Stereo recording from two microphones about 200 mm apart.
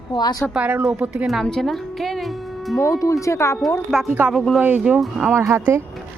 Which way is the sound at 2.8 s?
15° left (ahead or behind).